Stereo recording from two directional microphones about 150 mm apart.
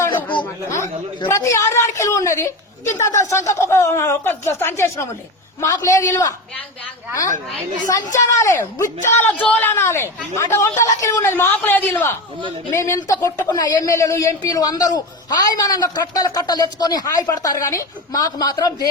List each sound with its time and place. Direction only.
0.4 s a sound: 20° left (ahead or behind)
1.3 s speech: 20° left (ahead or behind)
8.1 s speech: 20° left (ahead or behind)